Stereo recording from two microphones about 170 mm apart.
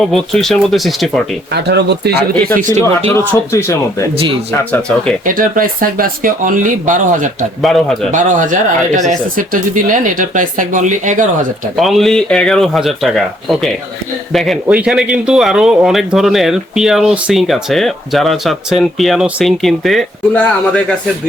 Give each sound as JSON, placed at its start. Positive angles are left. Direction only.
{"t": 0.1, "sound": "speech", "side_deg": 0}
{"t": 1.5, "sound": "speech", "side_deg": -80}
{"t": 2.6, "sound": "speech", "side_deg": -50}
{"t": 3.5, "sound": "speech", "side_deg": 20}
{"t": 5.2, "sound": "speech", "side_deg": -55}
{"t": 7.6, "sound": "speech", "side_deg": 0}
{"t": 8.1, "sound": "speech", "side_deg": -50}
{"t": 11.8, "sound": "speech", "side_deg": 0}